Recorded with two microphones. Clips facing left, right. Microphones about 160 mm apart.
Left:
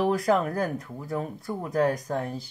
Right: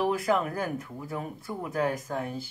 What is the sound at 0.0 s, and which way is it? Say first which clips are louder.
Speech: left 3 dB; 35° left (ahead or behind).